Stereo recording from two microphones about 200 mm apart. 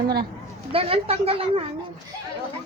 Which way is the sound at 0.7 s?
30° right (ahead or behind).